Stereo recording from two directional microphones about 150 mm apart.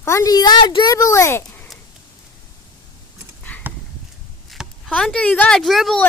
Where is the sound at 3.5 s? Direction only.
10° left (ahead or behind).